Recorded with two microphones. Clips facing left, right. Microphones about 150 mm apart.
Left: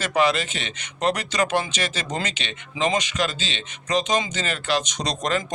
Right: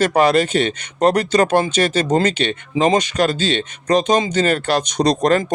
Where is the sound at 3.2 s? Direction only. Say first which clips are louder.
Right 9 dB; 55° right (ahead or behind).